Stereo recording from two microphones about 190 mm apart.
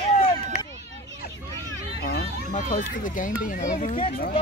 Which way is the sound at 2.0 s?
45° left (ahead or behind).